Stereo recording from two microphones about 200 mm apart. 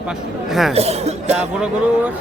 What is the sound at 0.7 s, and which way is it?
Speech, 30° right (ahead or behind).